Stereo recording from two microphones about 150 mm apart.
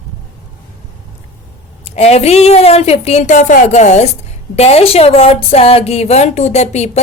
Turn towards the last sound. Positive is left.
turn(degrees=45)  # may be behind; listen again after turning